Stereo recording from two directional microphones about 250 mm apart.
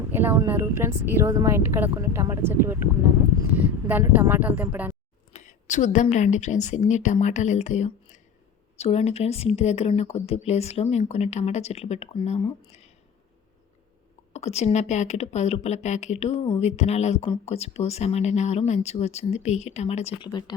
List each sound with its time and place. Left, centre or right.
0.1 s a woman's voice: centre
5.3 s a woman's voice: left
14.3 s a woman's voice: left